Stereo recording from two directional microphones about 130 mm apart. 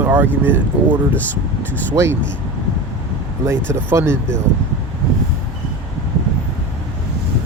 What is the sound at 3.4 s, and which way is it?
Speech, 20° right (ahead or behind).